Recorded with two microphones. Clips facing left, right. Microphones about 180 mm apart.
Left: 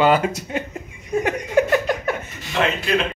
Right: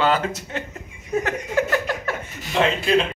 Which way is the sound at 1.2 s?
15° left (ahead or behind).